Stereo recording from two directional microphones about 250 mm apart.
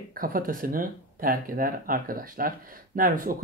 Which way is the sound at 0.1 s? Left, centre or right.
Right.